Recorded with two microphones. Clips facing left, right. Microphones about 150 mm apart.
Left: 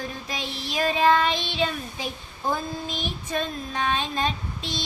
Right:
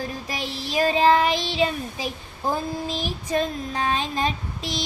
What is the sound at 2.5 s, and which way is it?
Child singing, 35° right (ahead or behind).